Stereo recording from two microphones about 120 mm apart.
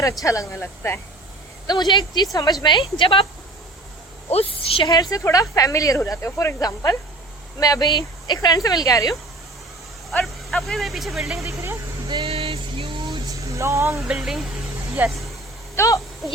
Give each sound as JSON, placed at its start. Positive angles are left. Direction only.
{"t": 0.3, "sound": "speech", "side_deg": 25}
{"t": 1.6, "sound": "a woman's voice", "side_deg": 35}
{"t": 4.3, "sound": "a woman's voice", "side_deg": 55}
{"t": 5.1, "sound": "a woman's voice", "side_deg": 30}
{"t": 10.1, "sound": "speech", "side_deg": 0}
{"t": 11.4, "sound": "speech", "side_deg": -25}
{"t": 12.0, "sound": "a sound", "side_deg": -50}
{"t": 13.5, "sound": "speech", "side_deg": -25}
{"t": 14.1, "sound": "speech", "side_deg": -5}
{"t": 15.0, "sound": "speech", "side_deg": -15}
{"t": 15.7, "sound": "speech", "side_deg": 25}